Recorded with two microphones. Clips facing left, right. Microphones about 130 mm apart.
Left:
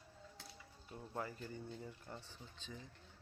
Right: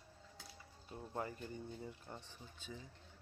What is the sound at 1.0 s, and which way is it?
Music, 25° right (ahead or behind).